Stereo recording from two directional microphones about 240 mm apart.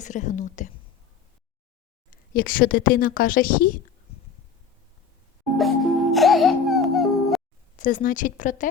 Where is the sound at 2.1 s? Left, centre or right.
Left.